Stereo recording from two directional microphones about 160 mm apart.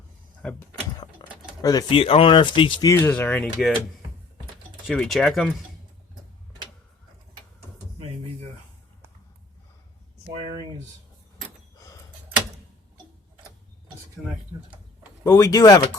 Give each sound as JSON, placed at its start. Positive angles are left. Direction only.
{"t": 0.4, "sound": "speech", "side_deg": 5}
{"t": 1.6, "sound": "speech", "side_deg": 25}
{"t": 2.9, "sound": "speech", "side_deg": 15}
{"t": 4.9, "sound": "speech", "side_deg": 0}
{"t": 13.8, "sound": "dishes", "side_deg": -5}
{"t": 15.2, "sound": "speech", "side_deg": 25}